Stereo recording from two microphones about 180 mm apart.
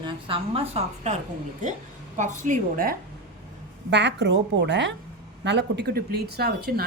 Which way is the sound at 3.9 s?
75° right (ahead or behind).